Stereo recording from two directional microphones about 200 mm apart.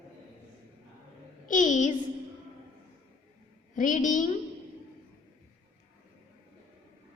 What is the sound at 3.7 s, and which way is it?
Child singing, 40° left (ahead or behind).